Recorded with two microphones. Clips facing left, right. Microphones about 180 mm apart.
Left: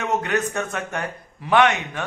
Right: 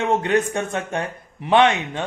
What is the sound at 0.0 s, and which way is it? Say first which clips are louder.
A man's voice: right 4 dB; 30° right (ahead or behind).